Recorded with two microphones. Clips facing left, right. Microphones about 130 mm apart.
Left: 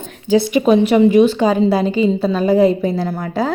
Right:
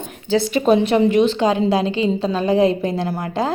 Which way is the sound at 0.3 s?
15° left (ahead or behind).